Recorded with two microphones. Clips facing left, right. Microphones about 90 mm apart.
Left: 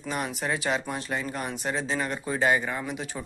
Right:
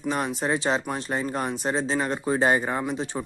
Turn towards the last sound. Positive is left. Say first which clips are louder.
# right 5 dB
turn(degrees=-30)  # may be behind; listen again after turning